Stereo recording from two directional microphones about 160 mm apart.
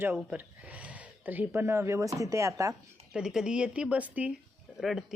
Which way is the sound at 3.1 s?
5° right (ahead or behind).